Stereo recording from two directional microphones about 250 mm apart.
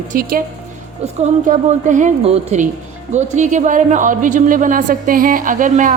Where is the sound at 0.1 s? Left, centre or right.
Right.